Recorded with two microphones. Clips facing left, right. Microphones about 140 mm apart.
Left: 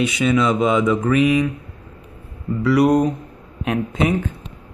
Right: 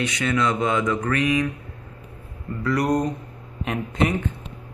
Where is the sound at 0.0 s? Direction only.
10° left (ahead or behind).